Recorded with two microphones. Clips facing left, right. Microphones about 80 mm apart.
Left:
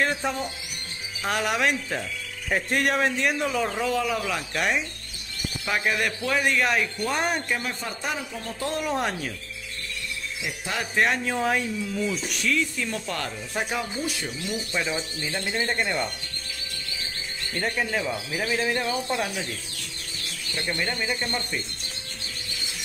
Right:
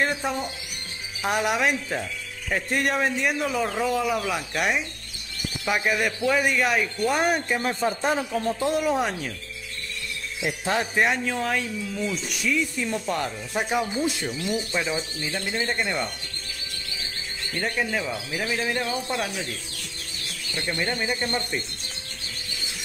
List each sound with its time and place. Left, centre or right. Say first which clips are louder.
0.0 s speech: even; centre
7.6 s a man's voice: right 7 dB; right
8.7 s speech: right 3 dB; centre
10.4 s a man's voice: right 7 dB; right
11.2 s speech: left 1 dB; centre
17.6 s speech: even; centre
20.6 s speech: right 1 dB; centre